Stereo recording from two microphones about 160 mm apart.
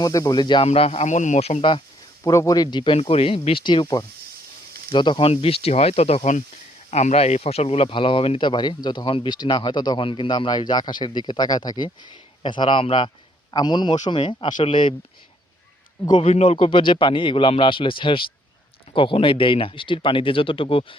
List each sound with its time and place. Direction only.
0.0 s speech: 20° left (ahead or behind)
0.7 s a man's voice: 40° left (ahead or behind)
2.2 s a man's voice: 20° left (ahead or behind)
16.0 s a man's voice: 35° left (ahead or behind)